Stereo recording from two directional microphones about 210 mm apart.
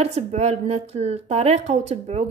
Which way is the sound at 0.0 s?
30° right (ahead or behind).